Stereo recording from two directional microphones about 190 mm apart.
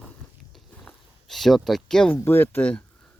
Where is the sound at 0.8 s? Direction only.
Centre (ahead or behind).